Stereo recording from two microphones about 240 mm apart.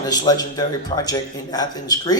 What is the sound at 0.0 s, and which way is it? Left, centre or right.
Speech, centre.